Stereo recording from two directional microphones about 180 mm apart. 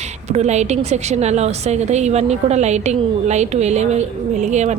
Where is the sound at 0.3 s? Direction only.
40° right (ahead or behind).